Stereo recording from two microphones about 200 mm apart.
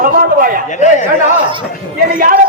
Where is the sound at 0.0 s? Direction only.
45° right (ahead or behind).